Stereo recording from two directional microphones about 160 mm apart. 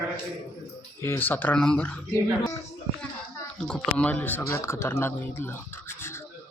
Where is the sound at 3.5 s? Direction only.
5° left (ahead or behind).